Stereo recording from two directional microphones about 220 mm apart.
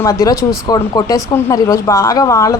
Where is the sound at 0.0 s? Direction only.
15° left (ahead or behind).